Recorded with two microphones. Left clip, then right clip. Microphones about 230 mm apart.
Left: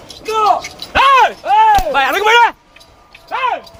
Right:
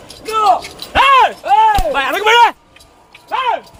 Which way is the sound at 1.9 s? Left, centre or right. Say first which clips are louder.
Left 2 dB; left.